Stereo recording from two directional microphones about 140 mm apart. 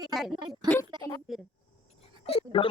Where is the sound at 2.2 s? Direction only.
45° left (ahead or behind).